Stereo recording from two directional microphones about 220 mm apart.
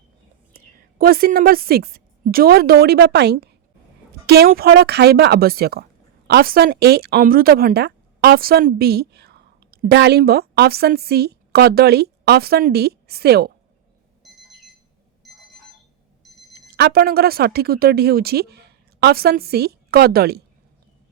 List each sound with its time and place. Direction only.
0.5 s a woman's voice: 45° right (ahead or behind)
15.2 s alarm clock: centre (ahead or behind)
16.2 s a sound: centre (ahead or behind)
16.6 s speech: 50° right (ahead or behind)